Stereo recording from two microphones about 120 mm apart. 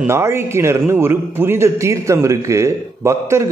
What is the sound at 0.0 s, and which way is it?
Speech, 20° right (ahead or behind).